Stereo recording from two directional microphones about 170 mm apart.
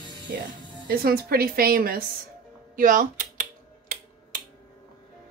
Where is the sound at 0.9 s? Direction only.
65° right (ahead or behind).